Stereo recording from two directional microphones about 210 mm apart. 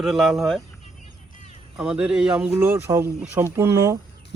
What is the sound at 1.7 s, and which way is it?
Speech, 5° right (ahead or behind).